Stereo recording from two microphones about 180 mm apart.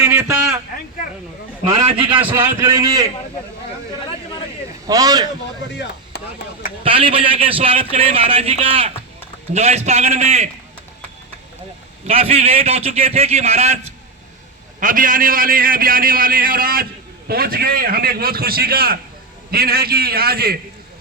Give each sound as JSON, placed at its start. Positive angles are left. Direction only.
{"t": 0.0, "sound": "a sound", "side_deg": -15}
{"t": 2.1, "sound": "a man's voice", "side_deg": -10}
{"t": 4.9, "sound": "a man's voice", "side_deg": -20}
{"t": 5.7, "sound": "speech", "side_deg": 70}
{"t": 6.7, "sound": "a man's voice", "side_deg": -30}
{"t": 12.0, "sound": "a man's voice", "side_deg": -35}
{"t": 14.8, "sound": "a man's voice", "side_deg": -50}